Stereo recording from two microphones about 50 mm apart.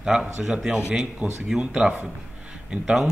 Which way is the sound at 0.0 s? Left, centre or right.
Centre.